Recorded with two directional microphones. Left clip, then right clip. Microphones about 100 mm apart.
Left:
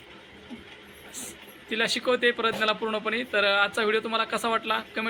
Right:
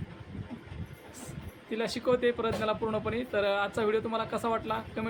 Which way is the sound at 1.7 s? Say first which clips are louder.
Left 4 dB; 15° right (ahead or behind).